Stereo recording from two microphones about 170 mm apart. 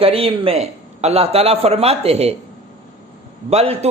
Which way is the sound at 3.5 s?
40° right (ahead or behind).